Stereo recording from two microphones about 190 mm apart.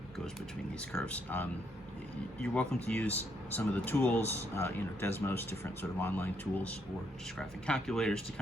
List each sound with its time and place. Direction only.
0.9 s speech: 5° left (ahead or behind)